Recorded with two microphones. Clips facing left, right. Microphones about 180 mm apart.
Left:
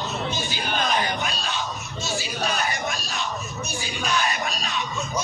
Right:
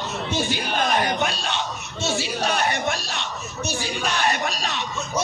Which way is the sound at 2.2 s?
65° right (ahead or behind).